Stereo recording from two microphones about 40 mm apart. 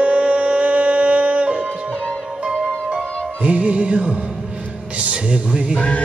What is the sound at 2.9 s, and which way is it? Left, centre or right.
Music, right.